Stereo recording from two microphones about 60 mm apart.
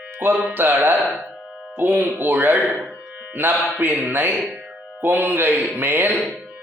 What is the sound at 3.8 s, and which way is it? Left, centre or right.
Speech, right.